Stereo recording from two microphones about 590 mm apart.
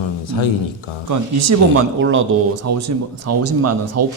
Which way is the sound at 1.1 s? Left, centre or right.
Right.